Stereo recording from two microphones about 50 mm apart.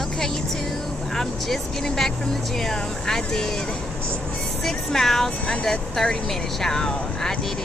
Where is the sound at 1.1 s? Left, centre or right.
Centre.